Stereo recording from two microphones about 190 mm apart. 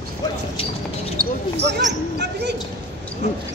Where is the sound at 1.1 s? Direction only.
55° right (ahead or behind).